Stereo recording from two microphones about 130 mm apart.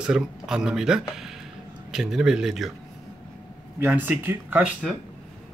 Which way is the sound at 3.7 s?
15° right (ahead or behind).